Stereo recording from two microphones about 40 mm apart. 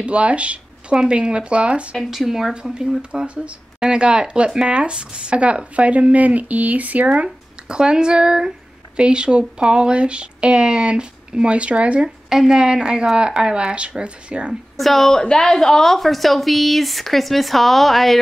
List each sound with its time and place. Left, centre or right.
0.0 s speech: right
2.0 s speech: centre
2.5 s speech: centre
3.3 s speech: right
7.6 s speech: right
12.3 s speech: centre
14.8 s speech: centre
15.1 s speech: centre